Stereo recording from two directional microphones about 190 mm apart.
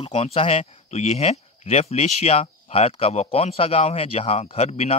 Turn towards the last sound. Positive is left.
turn(degrees=35)  # may be behind; listen again after turning